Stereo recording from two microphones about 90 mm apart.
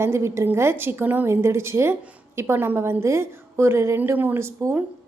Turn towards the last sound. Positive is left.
turn(degrees=-25)  # may be behind; listen again after turning